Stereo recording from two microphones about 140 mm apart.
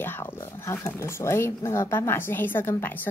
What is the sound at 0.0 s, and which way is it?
A woman's voice, 15° left (ahead or behind).